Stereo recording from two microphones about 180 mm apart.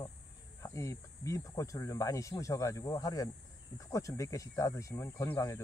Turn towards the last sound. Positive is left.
turn(degrees=15)  # may be behind; listen again after turning